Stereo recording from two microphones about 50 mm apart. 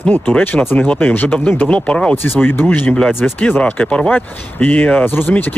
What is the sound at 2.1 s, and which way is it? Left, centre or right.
Speech, left.